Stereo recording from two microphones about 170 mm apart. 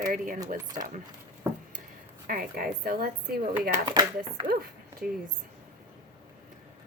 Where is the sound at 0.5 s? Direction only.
50° right (ahead or behind).